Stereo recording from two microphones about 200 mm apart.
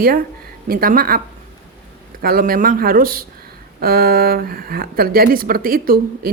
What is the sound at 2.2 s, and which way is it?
Speech, 45° right (ahead or behind).